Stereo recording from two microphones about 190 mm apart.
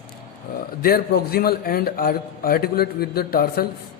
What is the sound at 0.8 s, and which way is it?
A man's voice, 55° left (ahead or behind).